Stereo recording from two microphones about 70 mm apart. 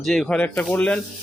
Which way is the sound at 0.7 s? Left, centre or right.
Centre.